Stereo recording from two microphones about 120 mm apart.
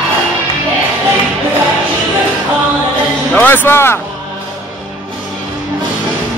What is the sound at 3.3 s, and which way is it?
Music, 15° left (ahead or behind).